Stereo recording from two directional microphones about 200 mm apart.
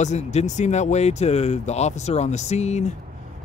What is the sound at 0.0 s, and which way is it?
Speech, 35° left (ahead or behind).